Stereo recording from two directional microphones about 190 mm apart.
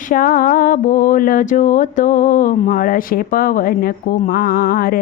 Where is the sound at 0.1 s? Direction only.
45° left (ahead or behind).